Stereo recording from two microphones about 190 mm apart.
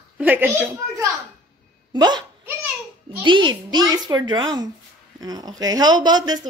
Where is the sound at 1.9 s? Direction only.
25° right (ahead or behind).